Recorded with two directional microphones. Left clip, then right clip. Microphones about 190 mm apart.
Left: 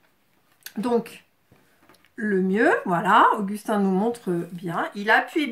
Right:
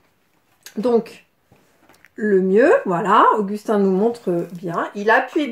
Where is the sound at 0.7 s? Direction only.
45° left (ahead or behind).